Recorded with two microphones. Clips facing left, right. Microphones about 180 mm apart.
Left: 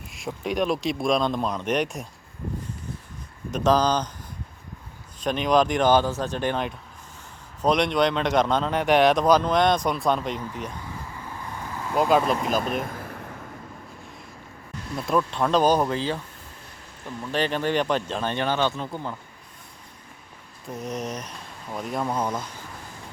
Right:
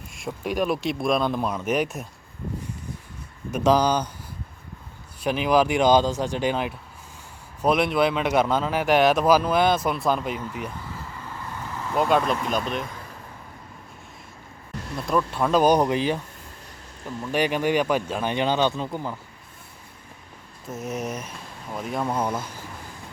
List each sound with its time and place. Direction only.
0.1 s speech: centre (ahead or behind)
3.5 s speech: 10° right (ahead or behind)
5.2 s speech: 5° right (ahead or behind)
11.2 s vehicle: 15° left (ahead or behind)
11.9 s speech: centre (ahead or behind)
12.8 s vehicle: 55° left (ahead or behind)
15.0 s speech: centre (ahead or behind)
17.3 s speech: 10° right (ahead or behind)
20.7 s speech: 5° right (ahead or behind)